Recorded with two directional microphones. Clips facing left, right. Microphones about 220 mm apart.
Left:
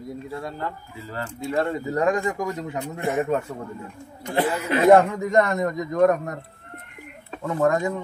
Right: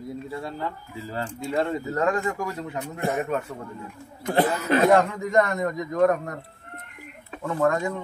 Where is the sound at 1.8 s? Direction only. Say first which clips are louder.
Left 2 dB; 15° left (ahead or behind).